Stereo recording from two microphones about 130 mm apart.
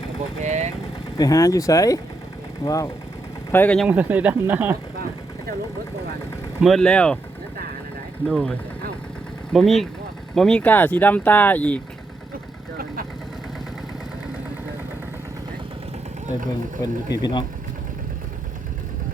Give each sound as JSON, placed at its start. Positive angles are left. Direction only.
{"t": 0.4, "sound": "vehicle", "side_deg": -60}
{"t": 1.2, "sound": "speech", "side_deg": 25}
{"t": 3.5, "sound": "speech", "side_deg": 15}
{"t": 3.8, "sound": "speech", "side_deg": -10}
{"t": 6.6, "sound": "speech", "side_deg": 0}
{"t": 8.3, "sound": "speech", "side_deg": 5}
{"t": 16.8, "sound": "speech", "side_deg": 30}